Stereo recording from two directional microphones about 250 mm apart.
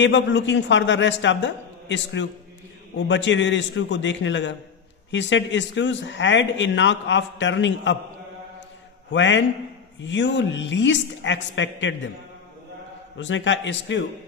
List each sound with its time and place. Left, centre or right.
0.0 s a man's voice: left
9.1 s a man's voice: left
13.2 s a man's voice: left